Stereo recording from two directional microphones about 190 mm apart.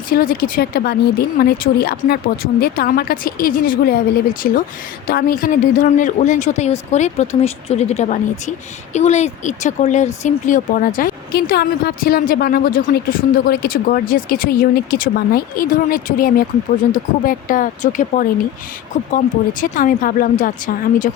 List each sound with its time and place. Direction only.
0.1 s speech: 50° left (ahead or behind)